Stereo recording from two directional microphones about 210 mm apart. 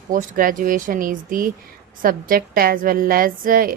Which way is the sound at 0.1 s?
40° right (ahead or behind).